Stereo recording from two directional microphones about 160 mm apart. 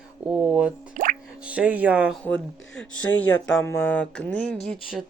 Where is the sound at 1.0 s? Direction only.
55° right (ahead or behind).